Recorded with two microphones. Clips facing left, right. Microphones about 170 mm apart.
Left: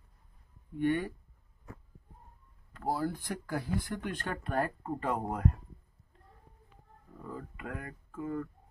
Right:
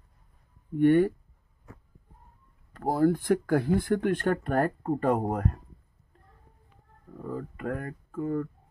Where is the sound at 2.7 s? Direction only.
45° right (ahead or behind).